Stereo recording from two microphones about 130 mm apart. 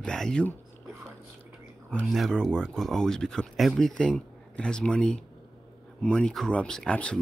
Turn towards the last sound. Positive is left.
turn(degrees=10)  # may be behind; listen again after turning